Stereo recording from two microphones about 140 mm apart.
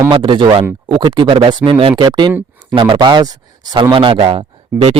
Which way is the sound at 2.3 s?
10° right (ahead or behind).